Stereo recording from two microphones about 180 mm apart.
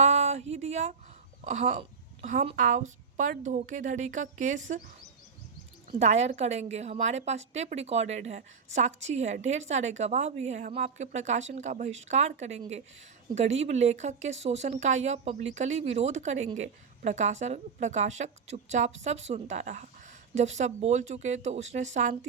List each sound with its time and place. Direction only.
0.0 s a sound: 40° right (ahead or behind)
1.5 s a woman's voice: 40° right (ahead or behind)
5.9 s a woman's voice: 40° right (ahead or behind)